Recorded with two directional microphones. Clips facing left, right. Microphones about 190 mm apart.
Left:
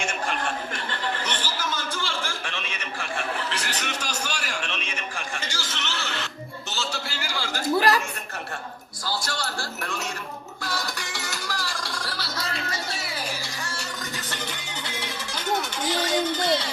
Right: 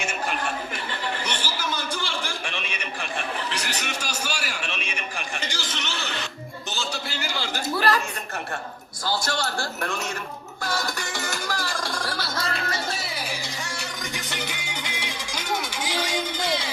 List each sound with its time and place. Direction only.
0.0 s chuckle: 5° right (ahead or behind)
6.7 s a sound: 15° right (ahead or behind)
7.8 s a sound: 10° left (ahead or behind)
9.0 s a man's voice: 50° right (ahead or behind)
10.6 s music: 50° right (ahead or behind)
14.3 s music: 10° right (ahead or behind)